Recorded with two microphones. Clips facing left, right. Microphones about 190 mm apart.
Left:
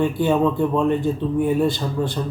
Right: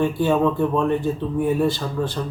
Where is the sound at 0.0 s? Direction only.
15° left (ahead or behind).